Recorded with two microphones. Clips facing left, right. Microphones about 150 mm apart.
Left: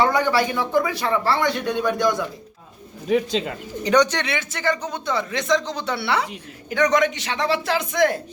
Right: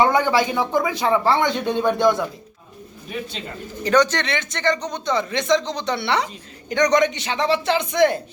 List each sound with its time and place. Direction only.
0.0 s speech: 20° right (ahead or behind)
3.1 s speech: 90° left
3.8 s speech: 15° left (ahead or behind)